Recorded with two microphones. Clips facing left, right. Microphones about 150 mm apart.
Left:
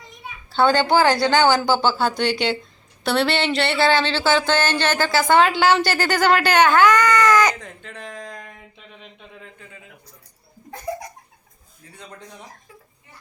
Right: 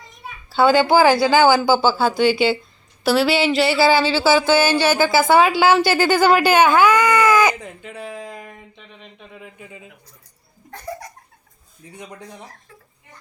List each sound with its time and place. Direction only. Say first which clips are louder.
0.1 s a child's voice: right 1 dB; 5° right (ahead or behind)
9.6 s speech: right 5 dB; 20° right (ahead or behind)
10.9 s a sound: left 3 dB; 15° left (ahead or behind)
11.9 s speech: right 4 dB; 15° right (ahead or behind)